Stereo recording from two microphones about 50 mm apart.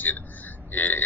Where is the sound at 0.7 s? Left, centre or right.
Left.